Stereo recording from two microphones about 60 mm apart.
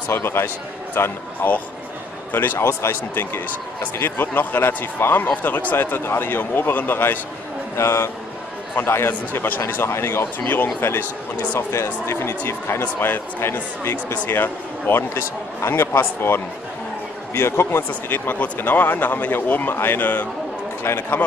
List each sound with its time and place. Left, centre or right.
0.1 s speech: left
2.6 s speech: left
4.3 s speech: left
5.8 s speech: left
7.7 s speech: left
11.7 s speech: left
14.1 s speech: left